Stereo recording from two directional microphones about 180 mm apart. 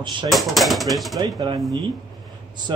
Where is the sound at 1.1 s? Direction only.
20° right (ahead or behind).